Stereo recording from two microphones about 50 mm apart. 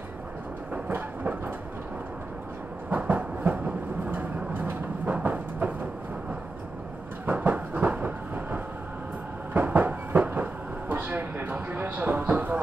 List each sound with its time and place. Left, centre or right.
0.8 s train: right
2.9 s train: right
7.2 s train: right